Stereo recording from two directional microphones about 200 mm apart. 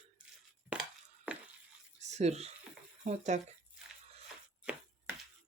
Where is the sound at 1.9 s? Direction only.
35° right (ahead or behind).